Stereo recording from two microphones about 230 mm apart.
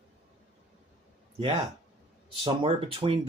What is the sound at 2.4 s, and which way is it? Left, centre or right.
Speech, right.